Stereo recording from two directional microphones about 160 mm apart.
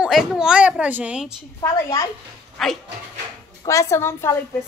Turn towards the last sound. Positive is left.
turn(degrees=15)  # may be behind; listen again after turning